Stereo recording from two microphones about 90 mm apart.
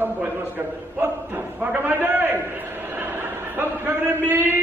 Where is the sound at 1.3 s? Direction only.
20° right (ahead or behind).